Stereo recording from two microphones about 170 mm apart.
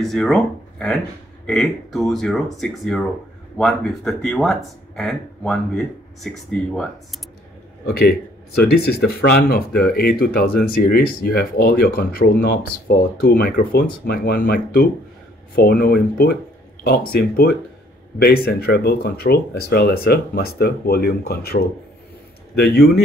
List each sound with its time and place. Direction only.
0.0 s speech: centre (ahead or behind)
7.8 s speech: 65° left (ahead or behind)